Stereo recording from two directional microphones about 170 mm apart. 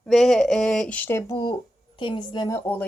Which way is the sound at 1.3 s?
25° left (ahead or behind).